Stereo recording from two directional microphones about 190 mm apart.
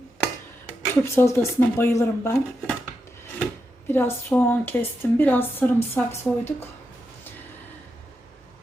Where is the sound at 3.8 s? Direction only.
10° left (ahead or behind).